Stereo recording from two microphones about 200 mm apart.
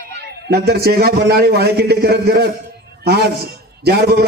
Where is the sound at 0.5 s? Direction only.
55° right (ahead or behind).